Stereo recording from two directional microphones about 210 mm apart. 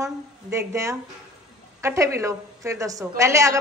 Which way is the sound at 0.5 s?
15° right (ahead or behind).